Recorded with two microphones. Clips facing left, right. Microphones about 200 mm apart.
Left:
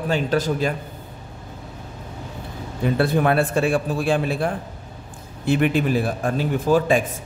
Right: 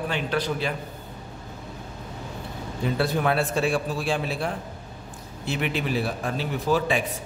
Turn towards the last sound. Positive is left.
turn(degrees=45)  # may be behind; listen again after turning